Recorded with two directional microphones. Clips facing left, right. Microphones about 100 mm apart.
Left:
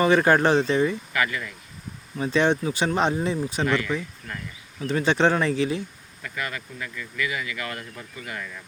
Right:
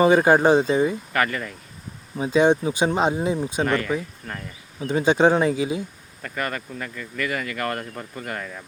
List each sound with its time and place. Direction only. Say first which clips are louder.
0.0 s speech: right 3 dB; 15° right (ahead or behind)
1.1 s speech: right 3 dB; 45° right (ahead or behind)
2.1 s speech: right 4 dB; 15° right (ahead or behind)
3.6 s speech: right 1 dB; 45° right (ahead or behind)
4.3 s insect: right 2 dB; 35° right (ahead or behind)
4.9 s speech: right 3 dB; 15° right (ahead or behind)
6.2 s speech: right 4 dB; 45° right (ahead or behind)